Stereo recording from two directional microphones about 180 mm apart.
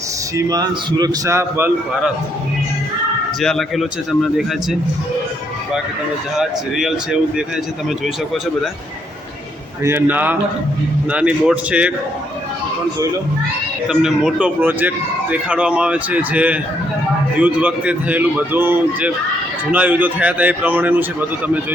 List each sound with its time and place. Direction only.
0.3 s a man's voice: 20° right (ahead or behind)
3.4 s speech: centre (ahead or behind)
6.3 s speech: centre (ahead or behind)
9.8 s speech: 10° right (ahead or behind)
13.8 s speech: 5° right (ahead or behind)